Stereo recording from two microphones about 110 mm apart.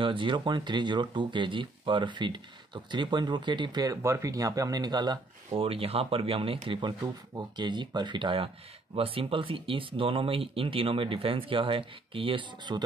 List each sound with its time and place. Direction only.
0.0 s speech: 50° right (ahead or behind)
5.5 s speech: 60° right (ahead or behind)